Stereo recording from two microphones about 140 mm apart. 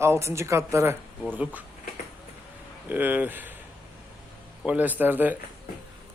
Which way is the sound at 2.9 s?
15° right (ahead or behind).